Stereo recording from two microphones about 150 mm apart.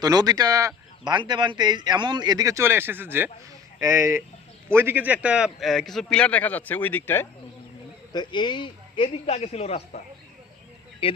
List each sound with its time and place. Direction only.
0.0 s a man's voice: 25° right (ahead or behind); by 7.3 s 15° left (ahead or behind)
8.1 s speech: 30° left (ahead or behind)
11.0 s speech: 40° left (ahead or behind)